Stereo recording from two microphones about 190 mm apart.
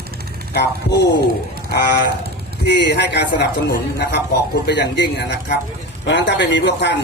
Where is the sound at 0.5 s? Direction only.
60° left (ahead or behind).